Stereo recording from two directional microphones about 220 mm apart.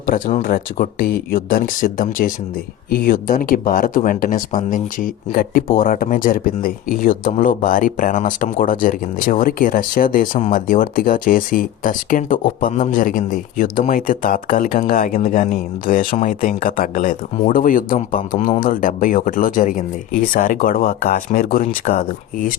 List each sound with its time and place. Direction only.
0.1 s speech: 40° left (ahead or behind)